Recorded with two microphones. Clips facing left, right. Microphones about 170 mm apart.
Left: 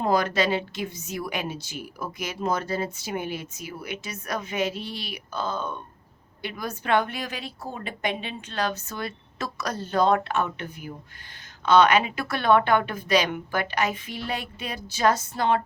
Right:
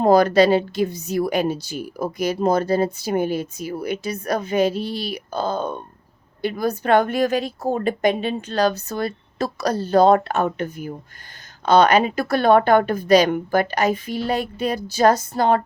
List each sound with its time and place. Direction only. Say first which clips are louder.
0.0 s a woman's voice: right 9 dB; 35° right (ahead or behind)